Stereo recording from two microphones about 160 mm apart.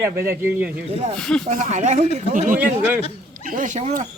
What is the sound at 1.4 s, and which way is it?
Speech, 45° right (ahead or behind).